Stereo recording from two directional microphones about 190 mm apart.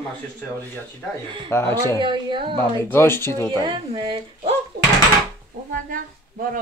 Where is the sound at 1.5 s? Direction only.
15° left (ahead or behind).